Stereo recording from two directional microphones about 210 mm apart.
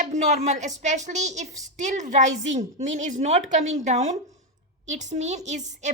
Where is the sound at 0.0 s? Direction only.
35° right (ahead or behind).